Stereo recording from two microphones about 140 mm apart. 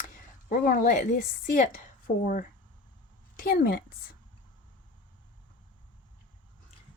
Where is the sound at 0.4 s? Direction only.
75° left (ahead or behind).